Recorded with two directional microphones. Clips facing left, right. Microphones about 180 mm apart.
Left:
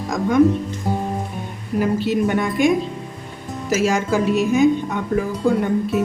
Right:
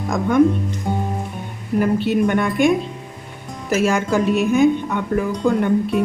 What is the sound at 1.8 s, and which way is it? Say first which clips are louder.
Speech: right 1 dB; 60° right (ahead or behind).